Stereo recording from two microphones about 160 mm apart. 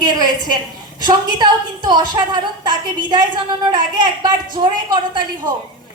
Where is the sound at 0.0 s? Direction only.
25° right (ahead or behind).